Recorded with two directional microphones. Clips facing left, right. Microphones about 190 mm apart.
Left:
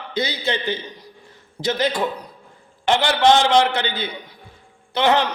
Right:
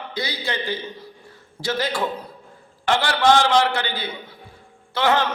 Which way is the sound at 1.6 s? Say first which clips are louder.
Left 3 dB; 20° left (ahead or behind).